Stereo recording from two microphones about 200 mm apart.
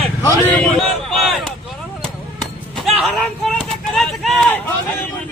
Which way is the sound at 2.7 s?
Centre (ahead or behind).